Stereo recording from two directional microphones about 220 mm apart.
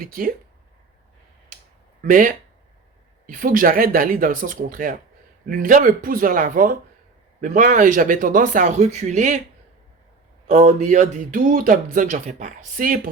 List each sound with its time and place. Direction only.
0.0 s speech: 40° right (ahead or behind)
2.0 s speech: 35° right (ahead or behind)
10.4 s speech: 30° right (ahead or behind)